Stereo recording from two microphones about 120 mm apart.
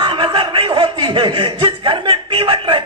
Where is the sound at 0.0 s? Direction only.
45° right (ahead or behind).